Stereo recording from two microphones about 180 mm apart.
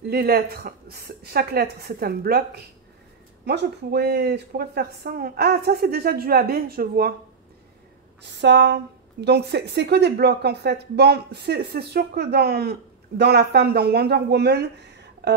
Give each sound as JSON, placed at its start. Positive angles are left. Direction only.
{"t": 0.1, "sound": "speech", "side_deg": -60}
{"t": 8.2, "sound": "a woman's voice", "side_deg": -75}